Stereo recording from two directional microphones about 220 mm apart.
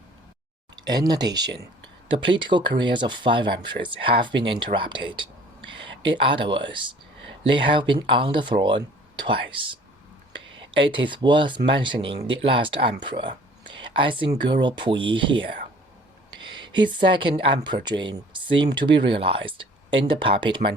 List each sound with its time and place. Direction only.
0.8 s speech: 20° right (ahead or behind)
10.8 s speech: 20° right (ahead or behind)
16.7 s speech: 20° right (ahead or behind)